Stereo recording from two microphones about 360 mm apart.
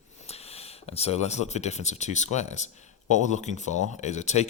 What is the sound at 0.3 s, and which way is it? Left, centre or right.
Speech, centre.